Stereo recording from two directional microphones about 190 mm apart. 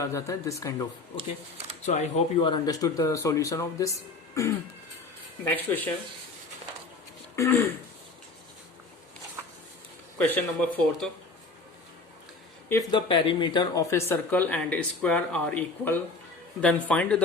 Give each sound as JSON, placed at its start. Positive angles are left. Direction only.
{"t": 0.1, "sound": "speech", "side_deg": 15}
{"t": 1.9, "sound": "speech", "side_deg": 35}
{"t": 5.5, "sound": "speech", "side_deg": 10}
{"t": 7.3, "sound": "speech", "side_deg": 15}
{"t": 10.2, "sound": "speech", "side_deg": 10}
{"t": 12.9, "sound": "speech", "side_deg": 25}